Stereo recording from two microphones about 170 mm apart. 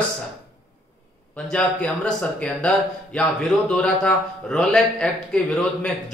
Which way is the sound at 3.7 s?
5° left (ahead or behind).